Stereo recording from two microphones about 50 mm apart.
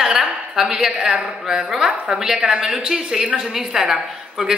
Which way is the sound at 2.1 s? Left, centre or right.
Centre.